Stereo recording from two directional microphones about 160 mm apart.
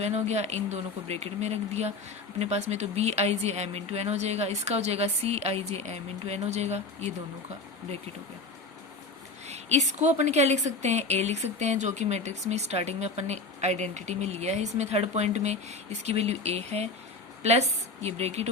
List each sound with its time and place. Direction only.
0.0 s a woman's voice: 45° right (ahead or behind)
9.5 s a woman's voice: 45° right (ahead or behind)